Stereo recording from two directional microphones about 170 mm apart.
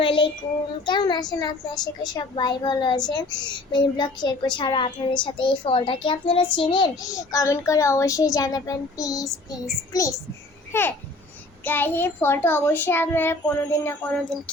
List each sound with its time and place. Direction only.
0.0 s child singing: 30° left (ahead or behind)
0.9 s a child's voice: 25° left (ahead or behind)
10.7 s a child's voice: 15° left (ahead or behind)